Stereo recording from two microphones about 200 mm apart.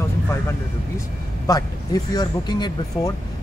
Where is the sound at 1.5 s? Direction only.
20° left (ahead or behind).